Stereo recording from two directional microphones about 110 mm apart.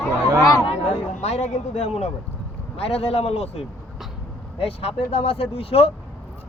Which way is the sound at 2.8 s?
65° left (ahead or behind).